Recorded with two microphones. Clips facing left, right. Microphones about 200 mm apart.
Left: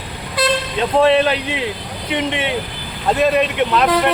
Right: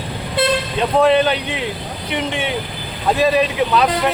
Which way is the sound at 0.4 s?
25° right (ahead or behind).